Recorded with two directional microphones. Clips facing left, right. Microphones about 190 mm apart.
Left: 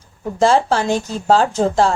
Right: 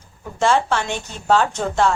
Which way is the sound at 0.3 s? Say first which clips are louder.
Left 4 dB; 35° left (ahead or behind).